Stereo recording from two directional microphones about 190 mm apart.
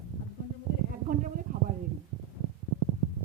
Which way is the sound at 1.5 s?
45° right (ahead or behind).